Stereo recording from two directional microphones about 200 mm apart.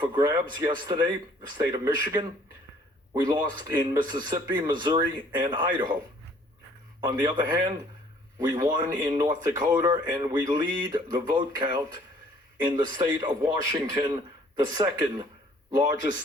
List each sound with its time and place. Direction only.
0.0 s speech: 20° right (ahead or behind)
7.0 s speech: 20° right (ahead or behind)